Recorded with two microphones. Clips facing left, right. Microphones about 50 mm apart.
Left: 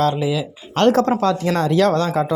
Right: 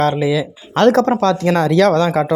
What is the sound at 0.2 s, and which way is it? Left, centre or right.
Speech, right.